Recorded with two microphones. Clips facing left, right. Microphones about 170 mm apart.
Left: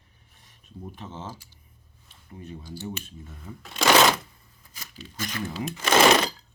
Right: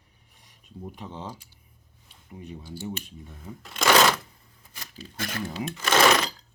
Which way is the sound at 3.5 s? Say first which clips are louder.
Right 1 dB; 20° right (ahead or behind).